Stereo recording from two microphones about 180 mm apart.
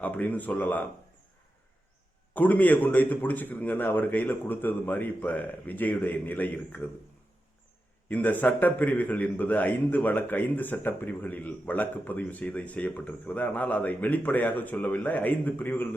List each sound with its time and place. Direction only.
0.0 s a man's voice: 10° left (ahead or behind)
2.3 s a man's voice: 10° left (ahead or behind)
8.0 s a man's voice: 10° left (ahead or behind)